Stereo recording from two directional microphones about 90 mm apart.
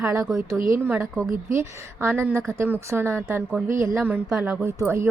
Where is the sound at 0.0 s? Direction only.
35° right (ahead or behind).